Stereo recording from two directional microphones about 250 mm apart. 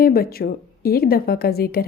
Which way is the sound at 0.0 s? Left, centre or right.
Left.